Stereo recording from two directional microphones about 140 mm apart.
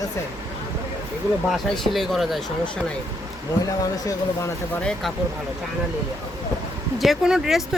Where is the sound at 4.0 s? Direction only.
25° left (ahead or behind).